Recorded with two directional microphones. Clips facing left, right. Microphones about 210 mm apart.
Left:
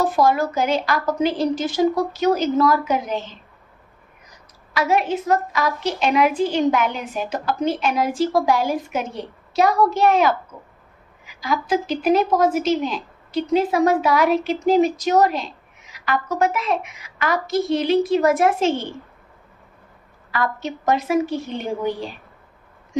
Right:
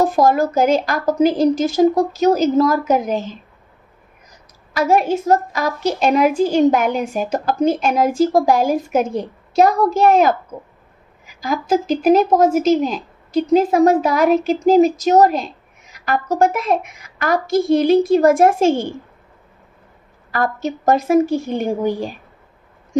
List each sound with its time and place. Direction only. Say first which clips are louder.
0.0 s a woman's voice: right 4 dB; 45° right (ahead or behind)
4.7 s a woman's voice: right 4 dB; 45° right (ahead or behind)
20.2 s a sound: right 3 dB; 45° right (ahead or behind)
20.6 s a woman's voice: right 6 dB; 45° right (ahead or behind)